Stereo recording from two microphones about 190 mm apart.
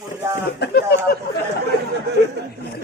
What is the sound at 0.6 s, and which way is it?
Speech, 55° left (ahead or behind).